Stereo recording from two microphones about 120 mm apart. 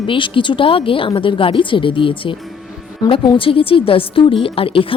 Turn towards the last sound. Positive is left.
turn(degrees=50)  # may be behind; listen again after turning